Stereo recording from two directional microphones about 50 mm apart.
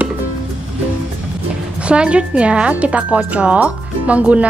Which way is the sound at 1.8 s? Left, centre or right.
Right.